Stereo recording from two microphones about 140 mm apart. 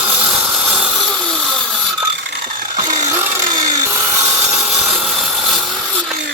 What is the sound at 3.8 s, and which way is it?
Wood, 15° right (ahead or behind).